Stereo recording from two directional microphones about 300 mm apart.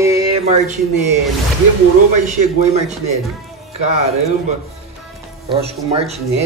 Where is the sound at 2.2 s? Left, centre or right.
Right.